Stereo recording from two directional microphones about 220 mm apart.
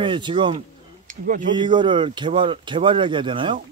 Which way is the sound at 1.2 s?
40° right (ahead or behind).